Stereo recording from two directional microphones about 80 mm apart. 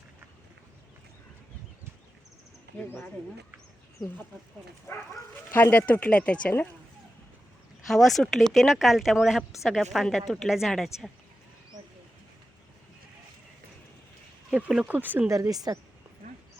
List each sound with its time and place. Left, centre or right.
5.5 s speech: left
7.9 s speech: centre
14.8 s speech: right
15.3 s a woman's voice: right